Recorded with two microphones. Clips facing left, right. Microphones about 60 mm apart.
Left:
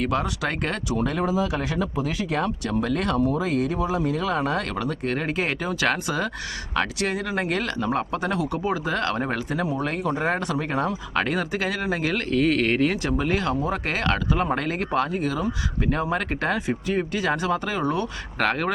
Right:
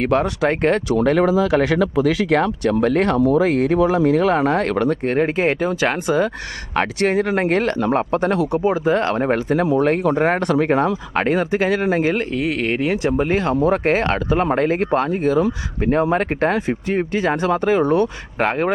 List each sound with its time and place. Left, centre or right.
0.0 s speech: right
0.9 s speech: right
6.7 s speech: right
8.5 s speech: right
9.8 s speech: right
11.1 s speech: right
12.3 s speech: centre; by 18.1 s right
18.3 s speech: right